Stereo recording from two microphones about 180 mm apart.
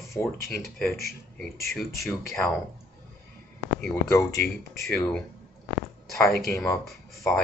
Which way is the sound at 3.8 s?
10° left (ahead or behind).